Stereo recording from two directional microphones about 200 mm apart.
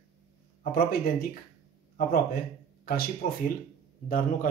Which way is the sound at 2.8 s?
50° left (ahead or behind).